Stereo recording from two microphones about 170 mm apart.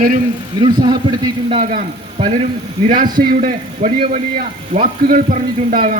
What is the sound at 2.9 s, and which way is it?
A man's voice, 55° right (ahead or behind).